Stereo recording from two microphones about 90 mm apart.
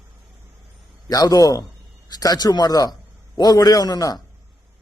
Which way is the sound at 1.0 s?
45° left (ahead or behind).